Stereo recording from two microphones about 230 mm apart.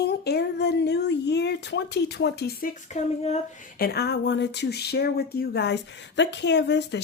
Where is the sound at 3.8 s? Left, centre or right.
Left.